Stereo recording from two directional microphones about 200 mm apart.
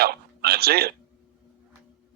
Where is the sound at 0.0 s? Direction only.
50° right (ahead or behind).